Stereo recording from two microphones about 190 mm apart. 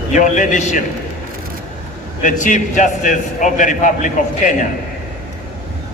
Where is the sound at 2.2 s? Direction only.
40° left (ahead or behind).